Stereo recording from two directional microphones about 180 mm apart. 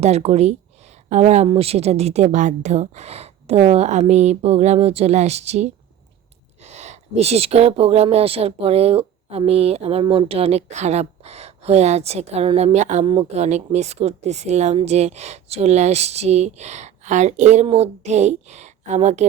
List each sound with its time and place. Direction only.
0.0 s speech: 35° right (ahead or behind)